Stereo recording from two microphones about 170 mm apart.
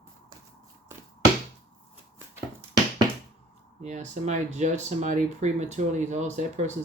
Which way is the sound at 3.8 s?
45° right (ahead or behind).